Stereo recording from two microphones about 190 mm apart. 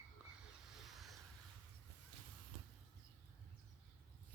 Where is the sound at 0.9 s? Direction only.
Centre (ahead or behind).